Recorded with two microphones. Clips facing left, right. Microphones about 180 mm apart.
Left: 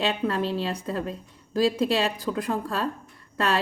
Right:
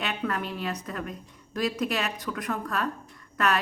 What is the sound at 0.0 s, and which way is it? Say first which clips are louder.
A woman's voice: left 5 dB; 30° left (ahead or behind).